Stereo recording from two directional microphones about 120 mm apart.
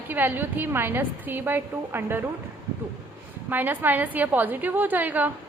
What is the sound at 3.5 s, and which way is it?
A woman's voice, 15° right (ahead or behind).